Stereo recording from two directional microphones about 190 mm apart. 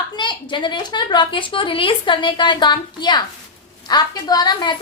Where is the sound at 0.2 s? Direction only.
25° left (ahead or behind).